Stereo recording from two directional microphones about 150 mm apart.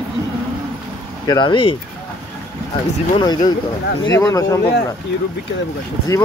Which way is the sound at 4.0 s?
25° left (ahead or behind).